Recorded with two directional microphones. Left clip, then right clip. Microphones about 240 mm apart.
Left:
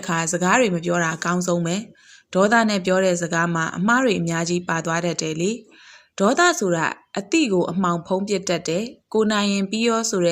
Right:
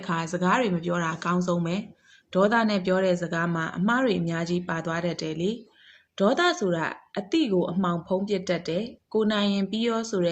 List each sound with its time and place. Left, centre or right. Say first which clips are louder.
0.0 s a woman's voice: left 5 dB; left